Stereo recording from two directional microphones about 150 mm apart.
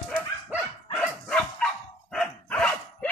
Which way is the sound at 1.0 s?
5° left (ahead or behind).